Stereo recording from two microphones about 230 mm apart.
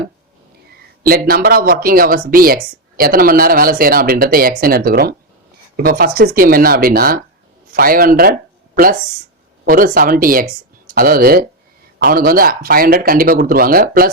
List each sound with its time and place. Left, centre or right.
1.0 s speech: right
9.6 s speech: right